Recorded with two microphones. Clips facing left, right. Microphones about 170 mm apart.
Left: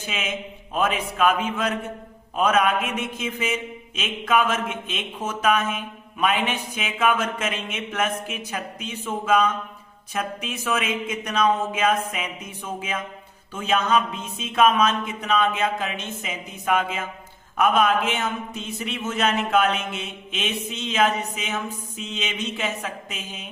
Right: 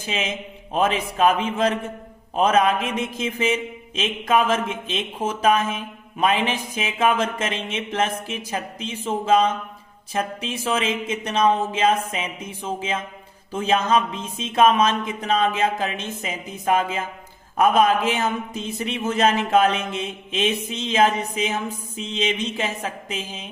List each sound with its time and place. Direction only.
0.0 s a man's voice: 30° right (ahead or behind)